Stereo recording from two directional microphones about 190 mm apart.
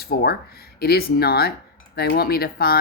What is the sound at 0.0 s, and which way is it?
Speech, 55° left (ahead or behind).